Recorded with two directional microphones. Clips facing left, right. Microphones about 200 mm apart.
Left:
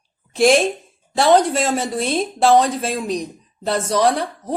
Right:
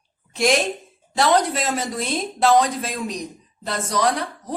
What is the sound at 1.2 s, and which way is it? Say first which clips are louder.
A woman's voice: left 4 dB; 30° left (ahead or behind).